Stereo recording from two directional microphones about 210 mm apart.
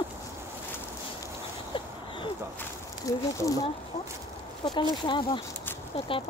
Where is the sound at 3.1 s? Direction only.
15° left (ahead or behind).